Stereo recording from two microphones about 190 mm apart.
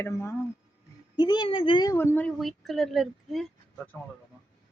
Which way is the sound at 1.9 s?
10° left (ahead or behind).